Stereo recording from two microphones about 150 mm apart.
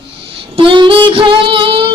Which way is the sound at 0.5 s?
35° right (ahead or behind).